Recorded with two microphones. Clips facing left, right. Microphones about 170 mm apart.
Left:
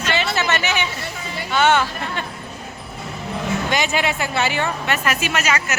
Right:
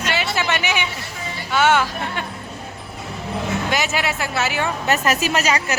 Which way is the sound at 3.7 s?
5° right (ahead or behind).